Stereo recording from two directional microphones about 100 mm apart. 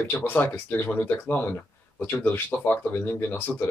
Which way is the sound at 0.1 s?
20° left (ahead or behind).